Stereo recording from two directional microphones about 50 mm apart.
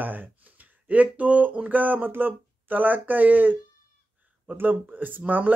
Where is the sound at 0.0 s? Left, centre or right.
Right.